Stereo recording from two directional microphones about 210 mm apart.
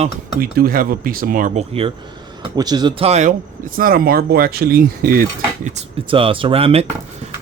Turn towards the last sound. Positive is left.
turn(degrees=-30)  # may be behind; listen again after turning